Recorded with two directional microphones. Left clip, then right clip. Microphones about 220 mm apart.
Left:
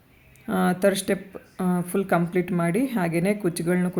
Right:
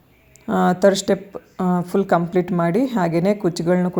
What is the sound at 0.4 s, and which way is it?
Speech, 15° right (ahead or behind).